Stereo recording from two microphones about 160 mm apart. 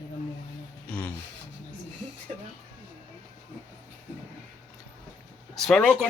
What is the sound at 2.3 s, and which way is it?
Speech, 40° right (ahead or behind).